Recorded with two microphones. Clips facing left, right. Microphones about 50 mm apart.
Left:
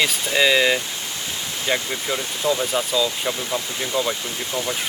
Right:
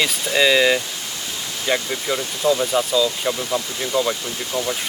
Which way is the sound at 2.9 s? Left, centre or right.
Centre.